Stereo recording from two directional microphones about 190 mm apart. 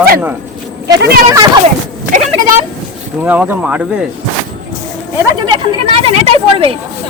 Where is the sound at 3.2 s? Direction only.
10° right (ahead or behind).